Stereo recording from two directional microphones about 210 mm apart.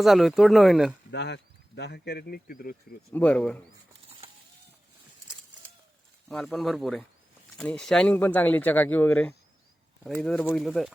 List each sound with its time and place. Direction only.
0.0 s speech: centre (ahead or behind)
1.1 s speech: 55° left (ahead or behind)
3.1 s speech: 5° left (ahead or behind)
6.2 s speech: centre (ahead or behind)